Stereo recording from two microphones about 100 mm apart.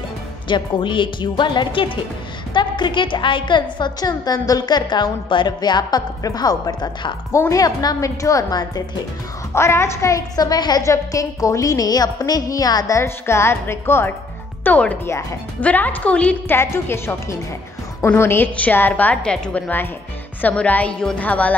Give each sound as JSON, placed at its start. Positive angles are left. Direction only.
{"t": 0.5, "sound": "a woman's voice", "side_deg": 55}
{"t": 7.3, "sound": "a woman's voice", "side_deg": 30}
{"t": 9.5, "sound": "a woman's voice", "side_deg": 25}
{"t": 16.5, "sound": "a woman's voice", "side_deg": 25}